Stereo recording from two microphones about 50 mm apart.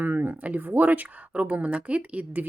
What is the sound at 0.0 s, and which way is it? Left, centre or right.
Speech, right.